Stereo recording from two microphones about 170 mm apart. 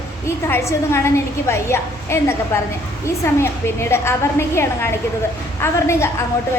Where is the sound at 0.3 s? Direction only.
15° left (ahead or behind).